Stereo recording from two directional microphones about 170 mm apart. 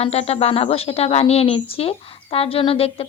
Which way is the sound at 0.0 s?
35° left (ahead or behind).